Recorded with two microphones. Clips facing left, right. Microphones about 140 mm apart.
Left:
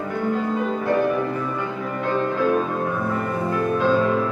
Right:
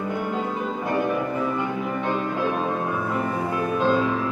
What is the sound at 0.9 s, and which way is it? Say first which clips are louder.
Music: left 1 dB; 15° right (ahead or behind).